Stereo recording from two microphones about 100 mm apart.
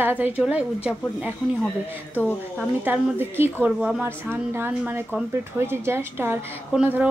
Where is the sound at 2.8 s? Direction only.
20° right (ahead or behind).